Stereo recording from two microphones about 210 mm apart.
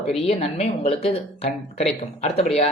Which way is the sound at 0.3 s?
30° left (ahead or behind).